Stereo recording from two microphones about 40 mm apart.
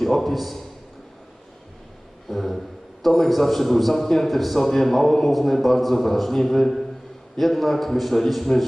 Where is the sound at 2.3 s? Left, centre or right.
Centre.